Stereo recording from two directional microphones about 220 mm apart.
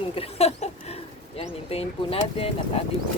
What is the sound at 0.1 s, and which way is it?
Speech, 25° left (ahead or behind).